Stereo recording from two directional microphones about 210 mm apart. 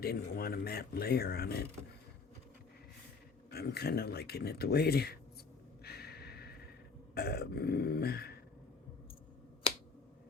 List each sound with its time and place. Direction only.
0.0 s speech: 45° left (ahead or behind)
3.5 s speech: 50° left (ahead or behind)
5.8 s a sound: 50° left (ahead or behind)
7.1 s speech: 50° left (ahead or behind)